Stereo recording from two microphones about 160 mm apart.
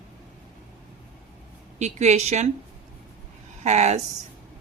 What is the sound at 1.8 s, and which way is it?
Speech, 45° right (ahead or behind).